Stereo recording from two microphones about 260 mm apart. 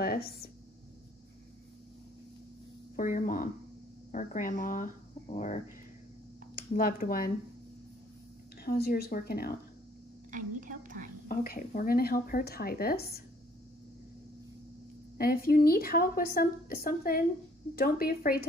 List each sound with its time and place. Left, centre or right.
0.0 s a sound: left
3.0 s a woman's voice: left
8.6 s a woman's voice: left
10.3 s whispering: right
11.2 s a woman's voice: left
15.1 s a woman's voice: left